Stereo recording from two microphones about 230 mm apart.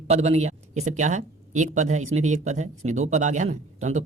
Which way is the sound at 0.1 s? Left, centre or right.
Right.